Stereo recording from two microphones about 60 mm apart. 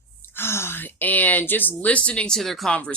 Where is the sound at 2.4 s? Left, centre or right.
Centre.